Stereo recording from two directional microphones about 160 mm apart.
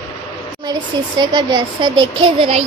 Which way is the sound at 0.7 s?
25° right (ahead or behind).